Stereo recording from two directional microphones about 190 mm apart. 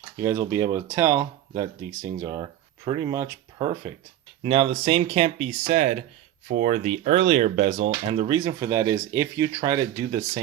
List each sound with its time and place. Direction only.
0.2 s speech: 15° right (ahead or behind)